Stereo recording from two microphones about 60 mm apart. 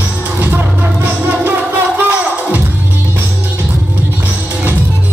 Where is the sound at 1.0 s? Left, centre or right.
Right.